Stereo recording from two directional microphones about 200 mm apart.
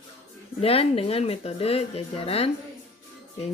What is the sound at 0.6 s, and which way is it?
Speech, 30° left (ahead or behind).